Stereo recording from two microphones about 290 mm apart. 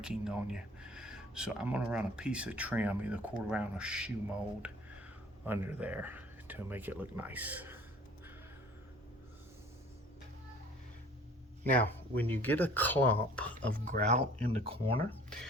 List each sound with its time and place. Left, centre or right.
0.0 s speech: centre
11.6 s speech: centre
13.7 s speech: right